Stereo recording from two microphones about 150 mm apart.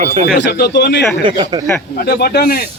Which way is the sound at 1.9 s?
90° left.